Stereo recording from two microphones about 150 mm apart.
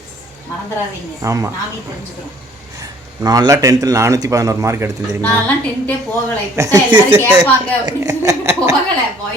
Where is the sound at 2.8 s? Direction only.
25° right (ahead or behind).